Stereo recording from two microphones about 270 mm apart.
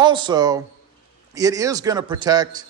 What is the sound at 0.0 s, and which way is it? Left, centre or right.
A man's voice, centre.